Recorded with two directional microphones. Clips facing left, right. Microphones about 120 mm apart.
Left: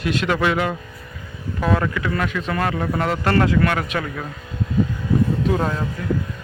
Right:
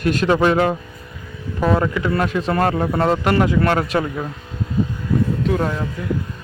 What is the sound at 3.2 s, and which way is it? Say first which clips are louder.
Speech: right 1 dB; 15° right (ahead or behind).